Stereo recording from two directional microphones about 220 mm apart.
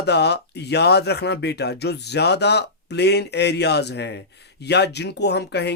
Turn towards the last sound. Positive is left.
turn(degrees=50)  # may be behind; listen again after turning